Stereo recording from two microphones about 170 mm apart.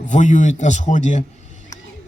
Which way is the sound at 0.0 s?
45° left (ahead or behind).